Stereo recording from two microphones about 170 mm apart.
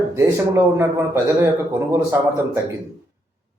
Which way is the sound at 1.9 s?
15° right (ahead or behind).